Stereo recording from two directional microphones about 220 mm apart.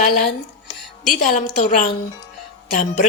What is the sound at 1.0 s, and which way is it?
A woman's voice, 35° left (ahead or behind).